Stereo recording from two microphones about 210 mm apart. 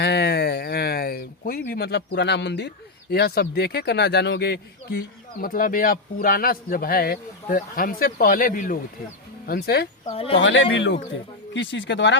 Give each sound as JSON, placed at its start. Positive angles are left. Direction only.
{"t": 0.0, "sound": "speech", "side_deg": 50}
{"t": 10.1, "sound": "speech", "side_deg": 25}
{"t": 10.4, "sound": "speech", "side_deg": 60}